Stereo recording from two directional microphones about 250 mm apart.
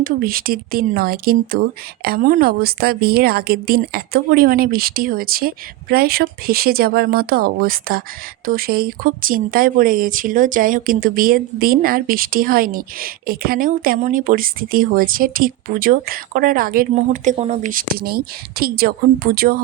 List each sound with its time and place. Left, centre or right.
0.0 s speech: right